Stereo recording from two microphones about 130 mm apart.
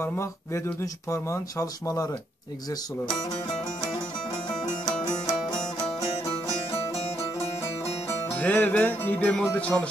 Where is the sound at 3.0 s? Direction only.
40° left (ahead or behind).